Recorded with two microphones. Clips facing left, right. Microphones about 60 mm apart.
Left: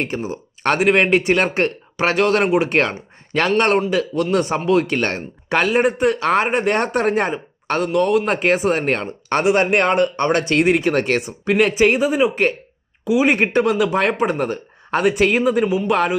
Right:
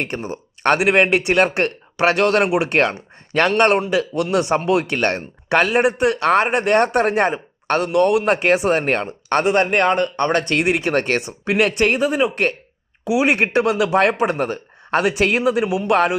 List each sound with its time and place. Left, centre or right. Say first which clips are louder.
0.6 s speech: right 1 dB; centre
9.3 s speech: left 1 dB; centre
10.2 s speech: left 1 dB; right
10.5 s speech: left 2 dB; centre
13.1 s speech: left 1 dB; centre